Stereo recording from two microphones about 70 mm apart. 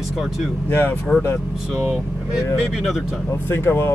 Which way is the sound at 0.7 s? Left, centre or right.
Left.